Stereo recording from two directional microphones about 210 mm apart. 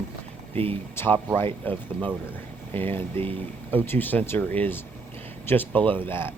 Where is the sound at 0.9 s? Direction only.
10° left (ahead or behind).